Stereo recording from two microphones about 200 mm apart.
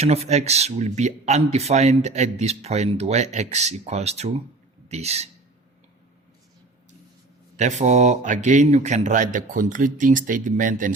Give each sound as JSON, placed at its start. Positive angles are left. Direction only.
{"t": 0.0, "sound": "speech", "side_deg": -30}
{"t": 7.5, "sound": "speech", "side_deg": -35}